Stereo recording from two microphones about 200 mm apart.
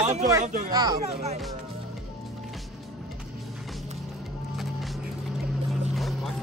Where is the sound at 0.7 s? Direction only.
20° right (ahead or behind).